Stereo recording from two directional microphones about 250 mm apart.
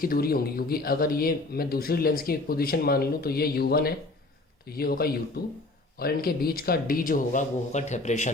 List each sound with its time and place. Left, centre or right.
0.0 s speech: left